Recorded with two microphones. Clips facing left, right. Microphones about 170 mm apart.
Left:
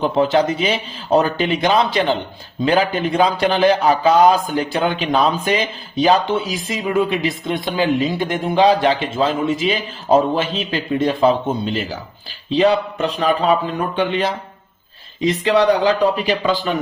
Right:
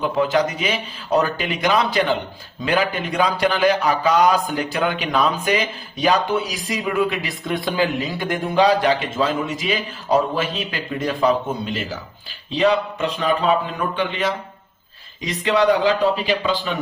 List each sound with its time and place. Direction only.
0.0 s speech: 30° left (ahead or behind)
15.3 s speech: 35° left (ahead or behind)